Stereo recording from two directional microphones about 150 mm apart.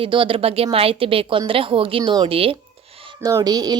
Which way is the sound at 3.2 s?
25° right (ahead or behind).